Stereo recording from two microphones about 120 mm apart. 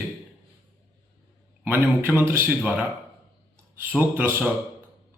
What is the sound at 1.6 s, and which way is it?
Speech, 15° right (ahead or behind).